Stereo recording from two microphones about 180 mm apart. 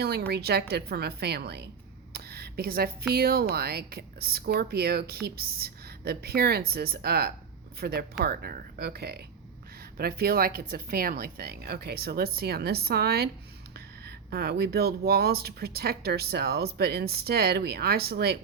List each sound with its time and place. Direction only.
0.0 s speech: 60° right (ahead or behind)
2.1 s a sound: 60° right (ahead or behind)
3.1 s speech: 60° right (ahead or behind)